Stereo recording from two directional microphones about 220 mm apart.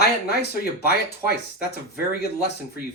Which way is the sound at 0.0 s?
45° left (ahead or behind).